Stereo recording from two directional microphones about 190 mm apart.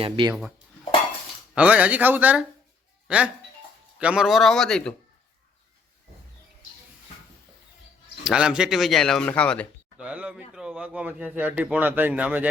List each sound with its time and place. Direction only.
0.0 s dishes: 25° right (ahead or behind)
1.5 s speech: 5° right (ahead or behind)
8.2 s speech: 5° right (ahead or behind)
10.0 s speech: 5° right (ahead or behind)